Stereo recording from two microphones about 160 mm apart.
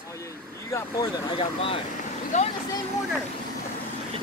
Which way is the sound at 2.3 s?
45° left (ahead or behind).